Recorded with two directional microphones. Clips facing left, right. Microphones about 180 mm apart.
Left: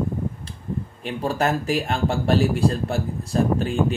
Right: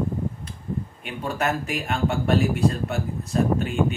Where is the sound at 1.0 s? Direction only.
35° left (ahead or behind).